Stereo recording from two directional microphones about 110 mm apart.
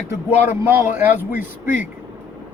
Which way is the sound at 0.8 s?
20° right (ahead or behind).